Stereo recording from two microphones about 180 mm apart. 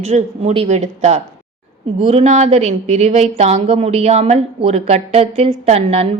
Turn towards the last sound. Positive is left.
turn(degrees=-35)  # may be behind; listen again after turning